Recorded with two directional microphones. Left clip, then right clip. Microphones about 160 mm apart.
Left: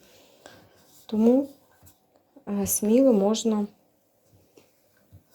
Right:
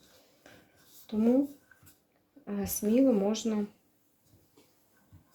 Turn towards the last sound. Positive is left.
turn(degrees=35)  # may be behind; listen again after turning